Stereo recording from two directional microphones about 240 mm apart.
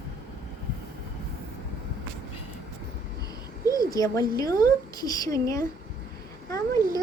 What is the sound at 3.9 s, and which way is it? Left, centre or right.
Speech, centre.